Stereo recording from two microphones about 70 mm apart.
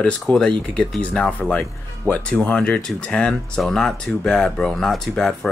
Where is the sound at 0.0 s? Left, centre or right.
Centre.